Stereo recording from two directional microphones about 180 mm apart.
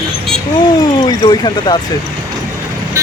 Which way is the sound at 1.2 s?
25° left (ahead or behind).